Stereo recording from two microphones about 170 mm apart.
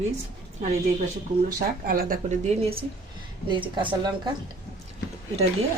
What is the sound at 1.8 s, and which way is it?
Speech, 55° right (ahead or behind).